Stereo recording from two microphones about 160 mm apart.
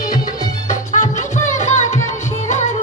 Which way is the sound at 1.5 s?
45° left (ahead or behind).